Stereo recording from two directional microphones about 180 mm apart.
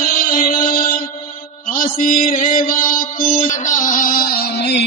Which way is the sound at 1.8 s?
50° left (ahead or behind).